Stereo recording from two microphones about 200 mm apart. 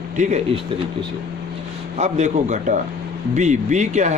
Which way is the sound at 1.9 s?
35° right (ahead or behind).